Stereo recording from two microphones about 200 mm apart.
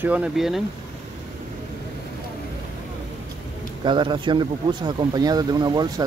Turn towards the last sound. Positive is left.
turn(degrees=-20)  # may be behind; listen again after turning